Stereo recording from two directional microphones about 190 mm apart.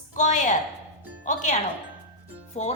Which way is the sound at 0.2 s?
40° left (ahead or behind).